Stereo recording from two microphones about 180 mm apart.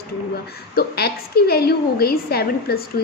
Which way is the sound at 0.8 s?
60° left (ahead or behind).